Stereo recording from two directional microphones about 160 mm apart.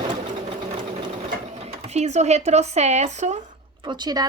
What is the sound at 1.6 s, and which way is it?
Speech, 40° right (ahead or behind).